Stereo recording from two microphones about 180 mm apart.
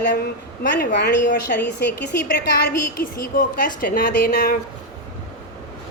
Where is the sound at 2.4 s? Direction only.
60° left (ahead or behind).